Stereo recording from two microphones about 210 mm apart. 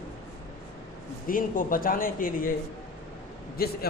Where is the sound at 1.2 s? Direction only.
40° left (ahead or behind).